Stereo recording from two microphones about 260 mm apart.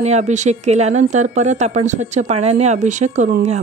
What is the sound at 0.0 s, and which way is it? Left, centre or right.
A woman's voice, right.